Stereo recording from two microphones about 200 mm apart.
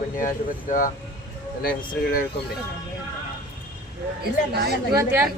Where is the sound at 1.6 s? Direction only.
45° left (ahead or behind).